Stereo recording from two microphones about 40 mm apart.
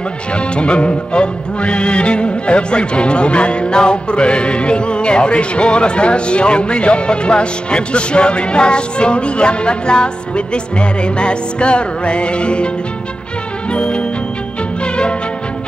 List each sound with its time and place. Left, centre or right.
0.3 s music: left